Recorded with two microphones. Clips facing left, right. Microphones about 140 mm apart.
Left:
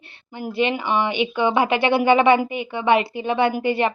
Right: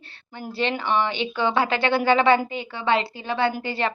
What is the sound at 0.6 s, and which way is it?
Speech, 10° left (ahead or behind).